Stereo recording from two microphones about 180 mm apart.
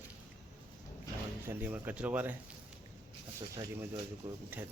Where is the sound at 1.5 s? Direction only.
10° right (ahead or behind).